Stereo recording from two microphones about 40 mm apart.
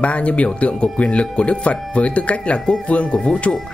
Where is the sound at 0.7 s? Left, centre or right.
Left.